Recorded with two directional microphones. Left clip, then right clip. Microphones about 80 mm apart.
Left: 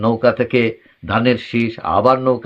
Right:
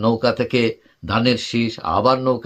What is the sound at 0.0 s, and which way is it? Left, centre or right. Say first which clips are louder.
Speech: left 3 dB; right.